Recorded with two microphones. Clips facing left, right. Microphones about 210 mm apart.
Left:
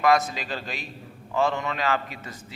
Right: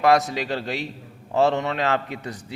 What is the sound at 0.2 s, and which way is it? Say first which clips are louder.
Speech: right 5 dB; 70° right (ahead or behind).